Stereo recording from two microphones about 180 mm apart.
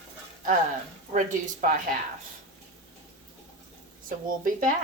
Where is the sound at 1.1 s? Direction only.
45° right (ahead or behind).